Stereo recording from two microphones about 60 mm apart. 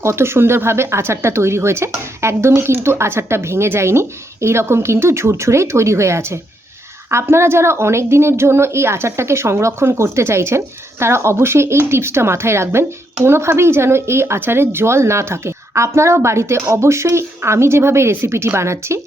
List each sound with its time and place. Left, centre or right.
0.0 s speech: right